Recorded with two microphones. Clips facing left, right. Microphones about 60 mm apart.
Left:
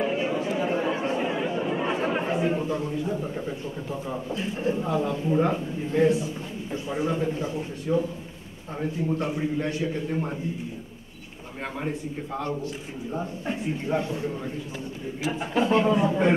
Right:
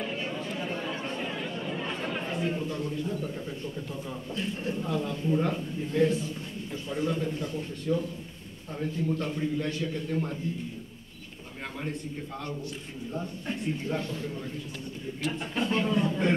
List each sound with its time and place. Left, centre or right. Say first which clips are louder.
0.2 s chatter: left 8 dB; centre
2.3 s a man's voice: left 5 dB; centre
9.2 s a man's voice: left 3 dB; centre
9.6 s a man's voice: left 4 dB; left
10.0 s a man's voice: left 2 dB; left
11.9 s a man's voice: left 5 dB; centre